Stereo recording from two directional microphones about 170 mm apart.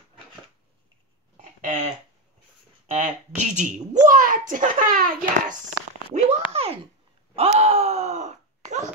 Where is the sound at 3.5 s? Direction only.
45° right (ahead or behind).